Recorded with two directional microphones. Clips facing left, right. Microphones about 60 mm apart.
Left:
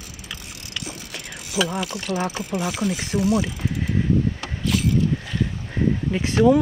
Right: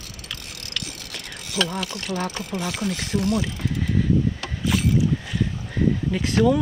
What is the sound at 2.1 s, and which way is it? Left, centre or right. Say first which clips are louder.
Speech: left 2 dB; centre.